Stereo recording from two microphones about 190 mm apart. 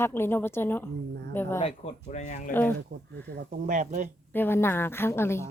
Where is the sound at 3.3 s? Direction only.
45° right (ahead or behind).